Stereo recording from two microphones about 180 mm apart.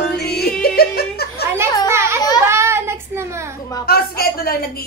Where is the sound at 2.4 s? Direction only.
15° right (ahead or behind).